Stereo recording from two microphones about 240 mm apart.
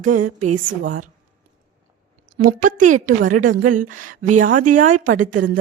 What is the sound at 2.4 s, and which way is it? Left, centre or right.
A woman's voice, right.